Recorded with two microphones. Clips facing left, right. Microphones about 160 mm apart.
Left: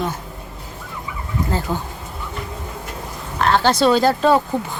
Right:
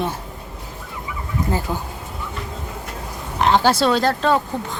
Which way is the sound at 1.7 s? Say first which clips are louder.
Left 2 dB; centre (ahead or behind).